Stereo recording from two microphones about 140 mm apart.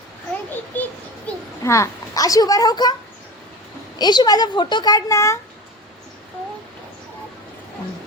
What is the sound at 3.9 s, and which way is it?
A child's voice, 30° left (ahead or behind).